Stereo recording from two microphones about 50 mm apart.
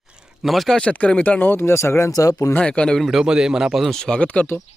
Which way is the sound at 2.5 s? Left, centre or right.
Left.